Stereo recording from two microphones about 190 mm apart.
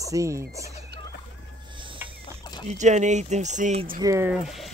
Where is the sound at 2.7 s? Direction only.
40° right (ahead or behind).